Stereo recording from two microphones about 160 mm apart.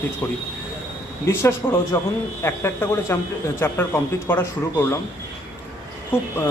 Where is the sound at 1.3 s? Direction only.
15° left (ahead or behind).